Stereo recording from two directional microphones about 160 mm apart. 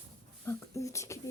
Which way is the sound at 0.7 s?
20° left (ahead or behind).